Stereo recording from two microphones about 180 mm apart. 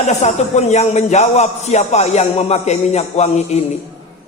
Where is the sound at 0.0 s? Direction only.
40° left (ahead or behind).